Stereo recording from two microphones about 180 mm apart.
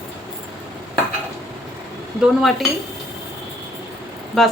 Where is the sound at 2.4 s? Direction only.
Centre (ahead or behind).